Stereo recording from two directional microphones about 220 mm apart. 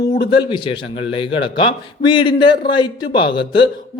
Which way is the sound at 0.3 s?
20° left (ahead or behind).